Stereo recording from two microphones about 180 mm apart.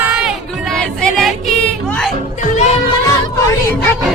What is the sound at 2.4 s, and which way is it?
Music, 45° left (ahead or behind).